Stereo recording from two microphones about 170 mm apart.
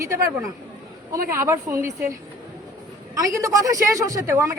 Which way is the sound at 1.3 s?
15° right (ahead or behind).